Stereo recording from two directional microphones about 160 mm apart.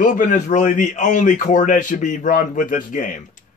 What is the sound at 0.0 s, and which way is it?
A man's voice, 55° left (ahead or behind).